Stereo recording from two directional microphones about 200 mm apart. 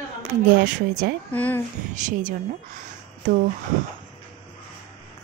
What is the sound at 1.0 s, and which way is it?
Speech, 50° right (ahead or behind).